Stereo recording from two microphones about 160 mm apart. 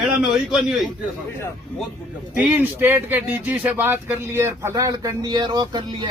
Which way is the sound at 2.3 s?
5° right (ahead or behind).